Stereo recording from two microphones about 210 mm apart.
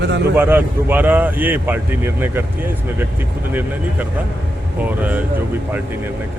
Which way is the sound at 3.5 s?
10° right (ahead or behind).